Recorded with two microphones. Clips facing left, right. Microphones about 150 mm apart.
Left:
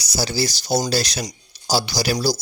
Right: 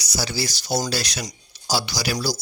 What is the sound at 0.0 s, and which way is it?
Speech, 35° left (ahead or behind).